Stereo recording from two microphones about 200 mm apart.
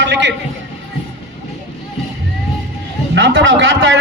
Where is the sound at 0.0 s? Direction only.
65° right (ahead or behind).